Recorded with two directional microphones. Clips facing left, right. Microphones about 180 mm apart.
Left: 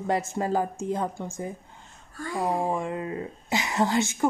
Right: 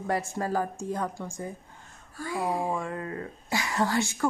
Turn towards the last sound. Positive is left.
turn(degrees=20)  # may be behind; listen again after turning